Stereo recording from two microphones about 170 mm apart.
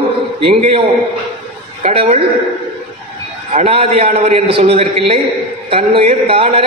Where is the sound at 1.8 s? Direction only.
40° right (ahead or behind).